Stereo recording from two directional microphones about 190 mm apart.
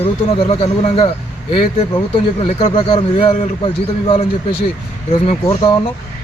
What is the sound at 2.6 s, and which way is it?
Speech, 25° left (ahead or behind).